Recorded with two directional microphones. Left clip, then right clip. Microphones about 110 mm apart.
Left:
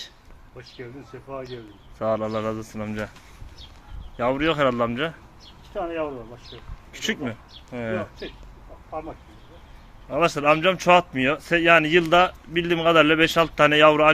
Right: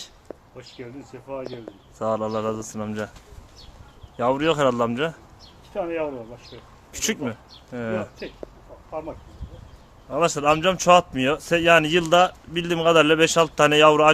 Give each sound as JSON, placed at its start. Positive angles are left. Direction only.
{"t": 2.0, "sound": "speech", "side_deg": -20}
{"t": 4.2, "sound": "speech", "side_deg": -30}
{"t": 6.9, "sound": "speech", "side_deg": -55}
{"t": 7.2, "sound": "speech", "side_deg": -25}
{"t": 10.1, "sound": "speech", "side_deg": -15}